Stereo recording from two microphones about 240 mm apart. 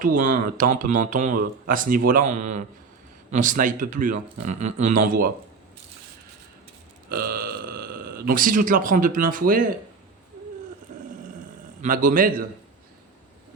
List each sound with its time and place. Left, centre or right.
0.0 s a man's voice: right
7.1 s speech: right
11.8 s a man's voice: right